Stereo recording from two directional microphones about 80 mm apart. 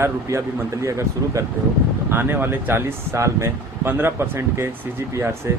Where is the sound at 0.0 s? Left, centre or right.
Right.